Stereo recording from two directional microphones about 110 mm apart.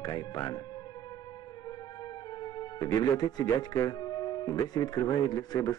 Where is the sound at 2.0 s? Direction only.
40° left (ahead or behind).